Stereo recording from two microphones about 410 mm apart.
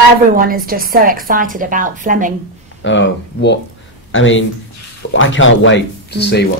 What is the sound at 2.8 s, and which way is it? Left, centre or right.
Speech, left.